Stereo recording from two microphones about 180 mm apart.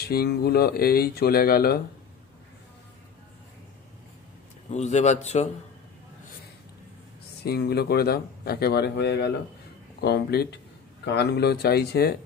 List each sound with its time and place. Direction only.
0.0 s speech: 60° left (ahead or behind)
4.6 s a man's voice: 40° left (ahead or behind)
7.4 s speech: 65° left (ahead or behind)